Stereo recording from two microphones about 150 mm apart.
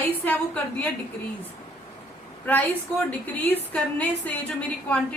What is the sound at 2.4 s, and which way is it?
A woman's voice, 10° left (ahead or behind).